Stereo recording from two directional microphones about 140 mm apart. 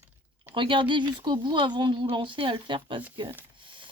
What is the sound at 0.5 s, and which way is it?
Speech, 35° right (ahead or behind).